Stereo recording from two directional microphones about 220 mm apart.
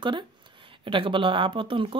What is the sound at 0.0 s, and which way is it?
Speech, 20° right (ahead or behind).